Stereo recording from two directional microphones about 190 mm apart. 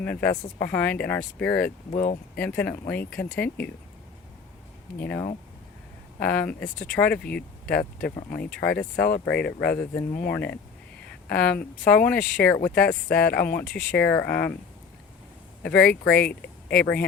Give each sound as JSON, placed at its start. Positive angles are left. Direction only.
{"t": 0.0, "sound": "speech", "side_deg": 5}
{"t": 1.9, "sound": "speech", "side_deg": 45}
{"t": 2.4, "sound": "speech", "side_deg": 5}
{"t": 6.1, "sound": "speech", "side_deg": 10}
{"t": 9.0, "sound": "speech", "side_deg": 50}
{"t": 9.3, "sound": "speech", "side_deg": 60}
{"t": 9.6, "sound": "speech", "side_deg": 10}
{"t": 11.9, "sound": "speech", "side_deg": 5}
{"t": 15.6, "sound": "speech", "side_deg": 5}
{"t": 15.9, "sound": "speech", "side_deg": 55}
{"t": 16.8, "sound": "speech", "side_deg": 5}